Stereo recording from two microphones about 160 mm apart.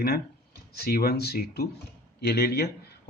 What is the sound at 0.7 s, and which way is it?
A man's voice, 75° left (ahead or behind).